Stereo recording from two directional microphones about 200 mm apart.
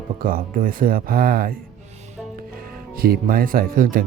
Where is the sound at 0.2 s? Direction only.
45° right (ahead or behind).